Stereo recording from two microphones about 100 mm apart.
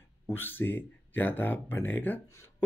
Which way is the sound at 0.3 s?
20° left (ahead or behind).